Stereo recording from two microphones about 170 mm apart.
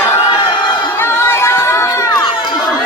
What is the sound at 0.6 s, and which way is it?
Crowd, 25° left (ahead or behind).